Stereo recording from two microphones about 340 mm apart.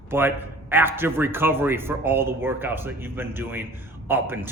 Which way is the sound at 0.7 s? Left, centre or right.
Centre.